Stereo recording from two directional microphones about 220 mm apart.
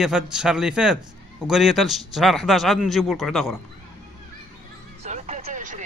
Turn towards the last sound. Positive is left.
turn(degrees=-35)  # may be behind; listen again after turning